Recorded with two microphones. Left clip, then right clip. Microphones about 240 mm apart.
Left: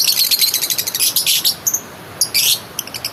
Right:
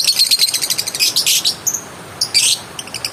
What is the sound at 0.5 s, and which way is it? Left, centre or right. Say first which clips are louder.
Cricket: right 1 dB; centre.